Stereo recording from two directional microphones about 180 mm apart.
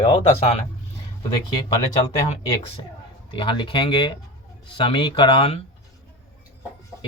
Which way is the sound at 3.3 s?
25° left (ahead or behind).